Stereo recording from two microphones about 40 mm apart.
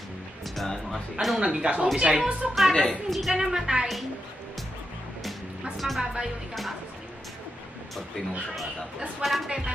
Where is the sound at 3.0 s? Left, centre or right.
Centre.